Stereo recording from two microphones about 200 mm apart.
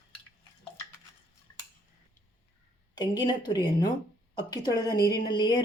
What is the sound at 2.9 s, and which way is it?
A woman's voice, 20° left (ahead or behind).